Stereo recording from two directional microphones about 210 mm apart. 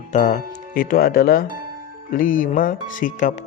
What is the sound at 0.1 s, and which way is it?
A man's voice, 35° left (ahead or behind).